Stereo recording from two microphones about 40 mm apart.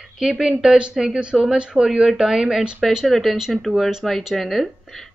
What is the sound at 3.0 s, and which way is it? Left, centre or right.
Speech, centre.